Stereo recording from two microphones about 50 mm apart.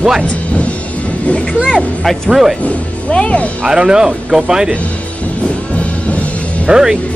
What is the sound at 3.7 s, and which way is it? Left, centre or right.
Speech, centre.